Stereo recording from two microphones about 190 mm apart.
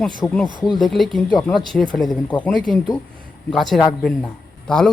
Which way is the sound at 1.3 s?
20° left (ahead or behind).